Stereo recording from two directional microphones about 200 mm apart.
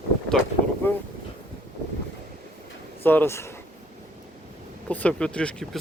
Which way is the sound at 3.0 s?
10° left (ahead or behind).